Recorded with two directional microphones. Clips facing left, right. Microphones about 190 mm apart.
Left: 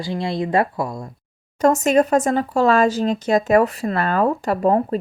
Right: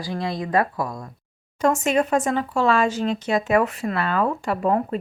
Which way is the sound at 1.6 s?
40° left (ahead or behind).